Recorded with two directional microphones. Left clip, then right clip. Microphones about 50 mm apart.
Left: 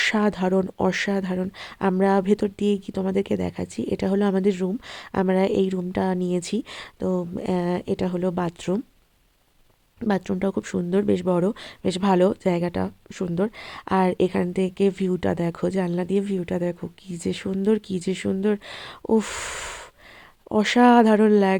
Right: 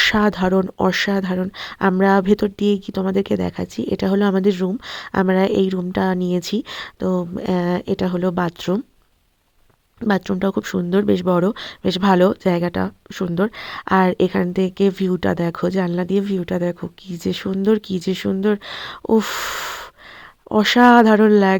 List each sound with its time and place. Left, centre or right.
0.0 s speech: right
10.1 s speech: right
14.4 s speech: right